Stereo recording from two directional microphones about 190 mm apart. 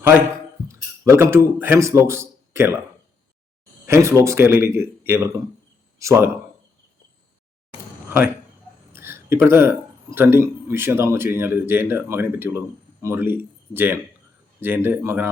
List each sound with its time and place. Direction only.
0.7 s speech: 15° right (ahead or behind)
3.8 s a man's voice: 15° right (ahead or behind)
8.9 s a sound: 10° right (ahead or behind)
10.2 s a man's voice: 10° right (ahead or behind)